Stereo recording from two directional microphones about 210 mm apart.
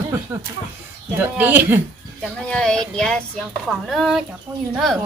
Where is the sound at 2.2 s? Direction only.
5° left (ahead or behind).